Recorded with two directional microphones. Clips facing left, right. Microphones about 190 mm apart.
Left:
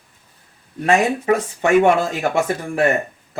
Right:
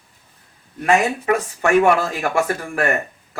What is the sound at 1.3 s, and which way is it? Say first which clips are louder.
Speech: left 1 dB; 25° left (ahead or behind).